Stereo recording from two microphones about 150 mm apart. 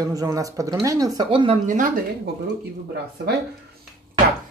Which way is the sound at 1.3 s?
35° right (ahead or behind).